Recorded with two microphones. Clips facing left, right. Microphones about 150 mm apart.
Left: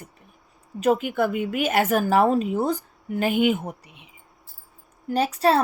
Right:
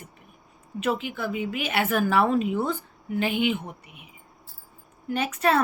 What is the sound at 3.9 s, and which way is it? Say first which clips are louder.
A woman's voice: right 1 dB; 25° left (ahead or behind).